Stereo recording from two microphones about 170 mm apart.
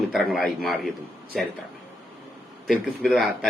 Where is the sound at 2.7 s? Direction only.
Centre (ahead or behind).